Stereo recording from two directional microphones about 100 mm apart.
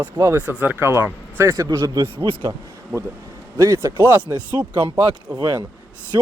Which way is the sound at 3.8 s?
30° right (ahead or behind).